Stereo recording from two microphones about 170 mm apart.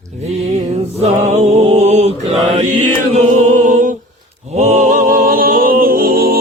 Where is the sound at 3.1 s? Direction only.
45° right (ahead or behind).